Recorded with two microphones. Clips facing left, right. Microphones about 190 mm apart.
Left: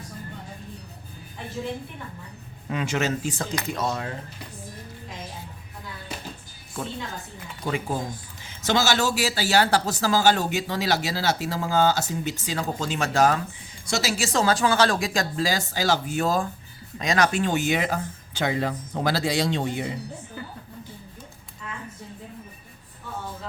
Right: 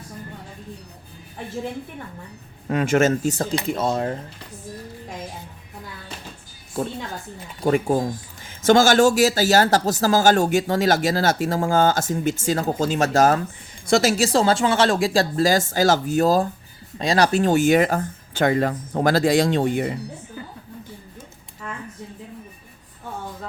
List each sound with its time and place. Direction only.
2.6 s speech: 50° right (ahead or behind)
3.5 s speech: 25° right (ahead or behind)
6.8 s a woman's voice: 35° right (ahead or behind)
7.6 s speech: 45° right (ahead or behind)
13.8 s speech: 55° right (ahead or behind)
14.3 s speech: 25° right (ahead or behind); by 19.9 s 55° right (ahead or behind)
21.6 s a sound: 50° right (ahead or behind)